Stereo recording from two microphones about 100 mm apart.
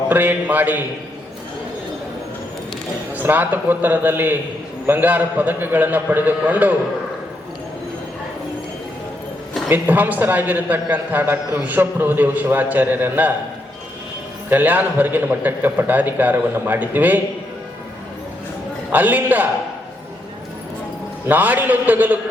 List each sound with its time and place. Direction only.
0.1 s a woman's voice: 20° right (ahead or behind)
3.2 s a woman's voice: 20° right (ahead or behind)
9.6 s a woman's voice: 20° right (ahead or behind)
14.5 s a woman's voice: 20° right (ahead or behind)
18.9 s a man's voice: 20° right (ahead or behind)
21.2 s a man's voice: 15° right (ahead or behind)